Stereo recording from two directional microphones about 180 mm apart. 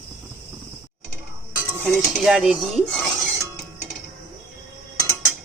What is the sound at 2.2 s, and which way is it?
Speech, 5° right (ahead or behind).